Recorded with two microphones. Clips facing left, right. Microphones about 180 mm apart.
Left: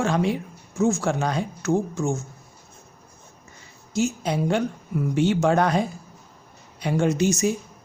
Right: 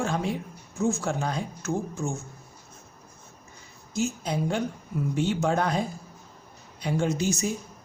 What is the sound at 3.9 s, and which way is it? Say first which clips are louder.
Speech: left 4 dB; 75° left (ahead or behind).